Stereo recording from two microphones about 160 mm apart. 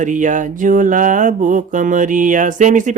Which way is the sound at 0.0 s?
50° right (ahead or behind).